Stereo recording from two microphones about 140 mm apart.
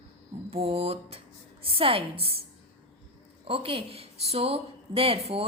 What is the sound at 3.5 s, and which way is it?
Speech, 40° right (ahead or behind).